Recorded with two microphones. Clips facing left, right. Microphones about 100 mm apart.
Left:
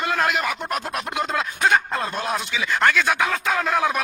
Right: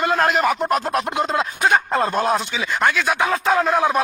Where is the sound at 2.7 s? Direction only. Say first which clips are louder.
Even; 20° right (ahead or behind).